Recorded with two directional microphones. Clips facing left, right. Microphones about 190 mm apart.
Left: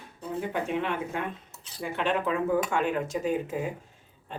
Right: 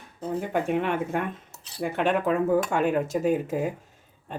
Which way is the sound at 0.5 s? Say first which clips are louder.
Right 5 dB; 50° right (ahead or behind).